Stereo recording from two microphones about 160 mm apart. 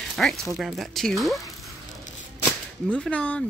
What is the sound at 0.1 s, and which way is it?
Speech, centre (ahead or behind).